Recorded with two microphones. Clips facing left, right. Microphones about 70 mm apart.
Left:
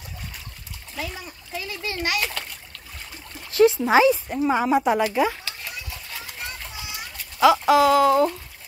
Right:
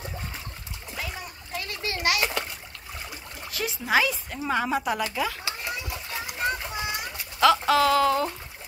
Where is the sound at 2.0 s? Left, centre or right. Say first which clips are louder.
Right 2 dB; centre.